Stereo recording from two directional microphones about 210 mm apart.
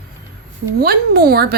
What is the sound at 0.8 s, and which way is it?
Speech, 45° right (ahead or behind).